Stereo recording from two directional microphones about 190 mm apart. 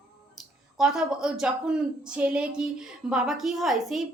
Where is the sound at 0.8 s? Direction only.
5° right (ahead or behind).